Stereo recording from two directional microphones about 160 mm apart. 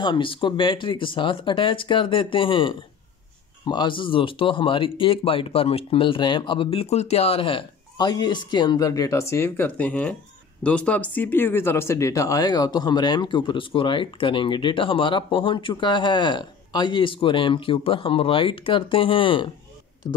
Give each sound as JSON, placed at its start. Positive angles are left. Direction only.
{"t": 0.0, "sound": "speech", "side_deg": 30}